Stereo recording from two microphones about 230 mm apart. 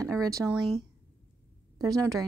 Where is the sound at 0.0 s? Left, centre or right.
Centre.